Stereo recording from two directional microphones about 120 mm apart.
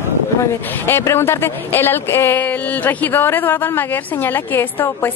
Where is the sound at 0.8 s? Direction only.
20° left (ahead or behind).